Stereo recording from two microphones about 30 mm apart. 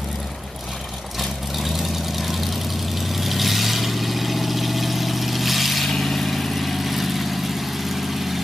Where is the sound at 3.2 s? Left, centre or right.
Centre.